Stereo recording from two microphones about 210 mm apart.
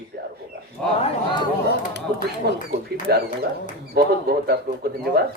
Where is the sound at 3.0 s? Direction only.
50° right (ahead or behind).